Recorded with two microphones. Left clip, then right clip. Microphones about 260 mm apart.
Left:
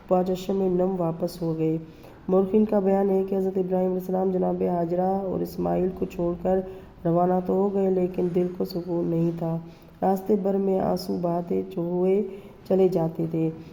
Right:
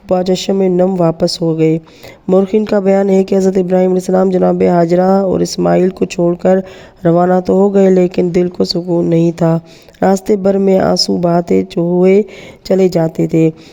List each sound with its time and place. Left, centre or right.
0.1 s speech: right